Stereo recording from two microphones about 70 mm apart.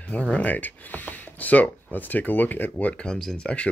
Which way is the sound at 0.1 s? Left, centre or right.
Centre.